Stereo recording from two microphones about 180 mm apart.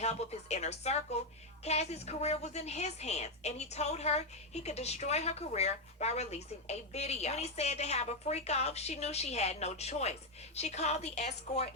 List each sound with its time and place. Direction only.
0.0 s a woman's voice: 35° left (ahead or behind)